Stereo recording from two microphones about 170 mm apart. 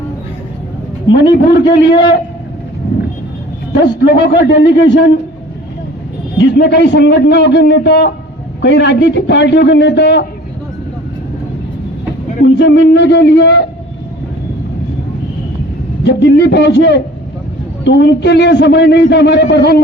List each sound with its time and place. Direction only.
1.1 s a man's voice: 85° left
4.0 s a man's voice: 80° left
6.4 s a man's voice: 85° left
12.5 s a man's voice: 90° left
16.0 s a man's voice: 90° left